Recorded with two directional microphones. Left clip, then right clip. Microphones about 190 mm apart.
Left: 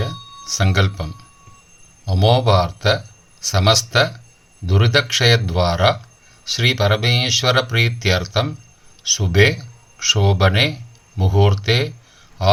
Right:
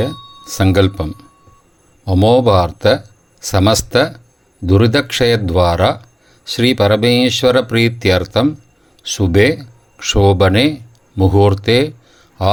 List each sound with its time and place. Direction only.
0.0 s a man's voice: 40° right (ahead or behind)